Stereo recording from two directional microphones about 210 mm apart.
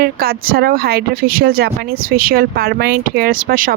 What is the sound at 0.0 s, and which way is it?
Speech, 45° right (ahead or behind).